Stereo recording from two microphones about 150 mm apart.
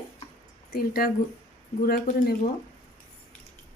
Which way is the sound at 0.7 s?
90° left.